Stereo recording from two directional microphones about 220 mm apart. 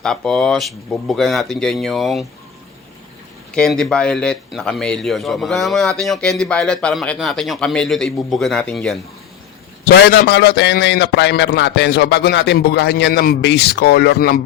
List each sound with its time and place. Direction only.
0.0 s speech: centre (ahead or behind)
3.5 s speech: 5° left (ahead or behind)
9.9 s a man's voice: 50° left (ahead or behind)